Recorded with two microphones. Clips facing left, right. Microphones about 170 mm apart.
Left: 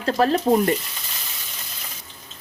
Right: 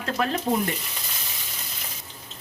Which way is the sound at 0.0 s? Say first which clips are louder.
Left 6 dB; 35° left (ahead or behind).